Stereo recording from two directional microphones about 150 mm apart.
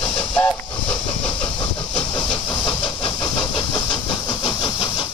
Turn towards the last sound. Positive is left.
turn(degrees=30)  # may be behind; listen again after turning